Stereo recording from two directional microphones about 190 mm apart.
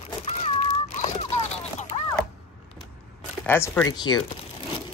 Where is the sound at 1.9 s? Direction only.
30° left (ahead or behind).